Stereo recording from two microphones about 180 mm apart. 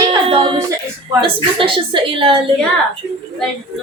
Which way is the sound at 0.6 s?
15° right (ahead or behind).